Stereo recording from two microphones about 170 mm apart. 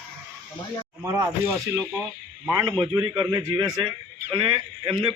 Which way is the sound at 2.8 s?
25° right (ahead or behind).